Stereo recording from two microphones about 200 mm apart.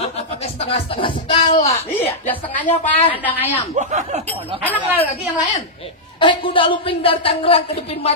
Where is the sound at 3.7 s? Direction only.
35° right (ahead or behind).